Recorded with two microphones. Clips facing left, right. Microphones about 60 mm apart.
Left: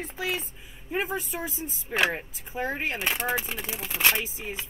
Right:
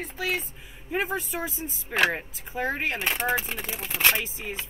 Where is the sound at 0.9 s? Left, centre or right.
Right.